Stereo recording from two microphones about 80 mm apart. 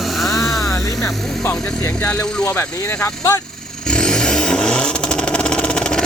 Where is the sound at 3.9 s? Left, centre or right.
Centre.